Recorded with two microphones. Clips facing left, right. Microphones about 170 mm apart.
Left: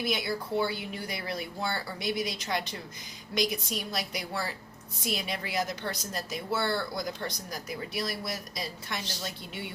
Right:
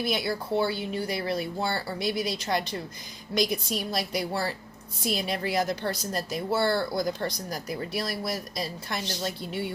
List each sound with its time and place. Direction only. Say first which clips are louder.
0.0 s a woman's voice: right 3 dB; 30° right (ahead or behind)